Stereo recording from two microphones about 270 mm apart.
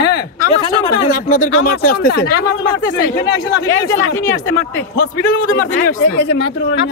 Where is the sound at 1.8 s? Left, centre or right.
Left.